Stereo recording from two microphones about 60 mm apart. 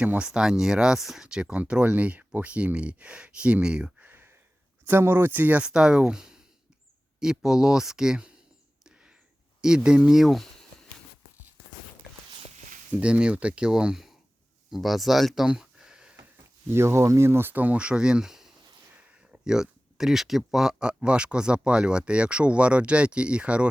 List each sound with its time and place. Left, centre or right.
0.0 s speech: right
0.3 s speech: centre
4.0 s a sound: right
4.9 s speech: right; by 8.3 s centre
9.6 s speech: centre
12.9 s speech: centre
15.4 s a sound: centre
16.6 s speech: right; by 23.6 s centre